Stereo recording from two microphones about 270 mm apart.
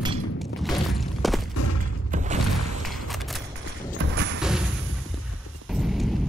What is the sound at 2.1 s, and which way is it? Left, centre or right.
Mechanisms, right.